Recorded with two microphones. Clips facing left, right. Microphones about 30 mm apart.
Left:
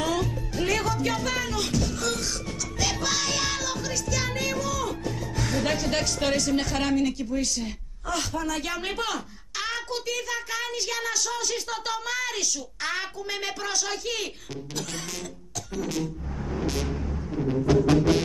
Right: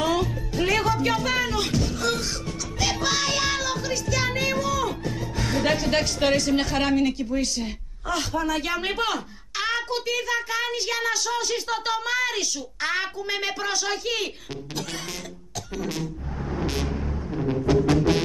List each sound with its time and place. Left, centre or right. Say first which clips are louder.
0.0 s music: right 3 dB; centre
5.4 s a woman's voice: right 3 dB; centre
16.4 s vehicle: right 1 dB; centre